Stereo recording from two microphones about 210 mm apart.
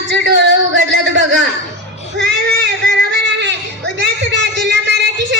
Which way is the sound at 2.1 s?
50° right (ahead or behind).